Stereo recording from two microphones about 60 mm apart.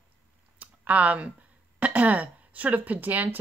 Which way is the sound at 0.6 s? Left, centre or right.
Right.